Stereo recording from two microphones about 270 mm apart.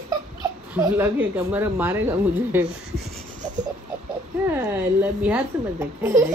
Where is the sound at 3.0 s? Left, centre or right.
Right.